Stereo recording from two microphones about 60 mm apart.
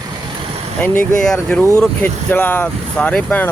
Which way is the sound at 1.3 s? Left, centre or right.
Centre.